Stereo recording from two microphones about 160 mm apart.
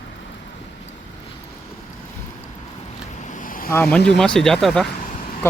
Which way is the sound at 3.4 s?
60° left (ahead or behind).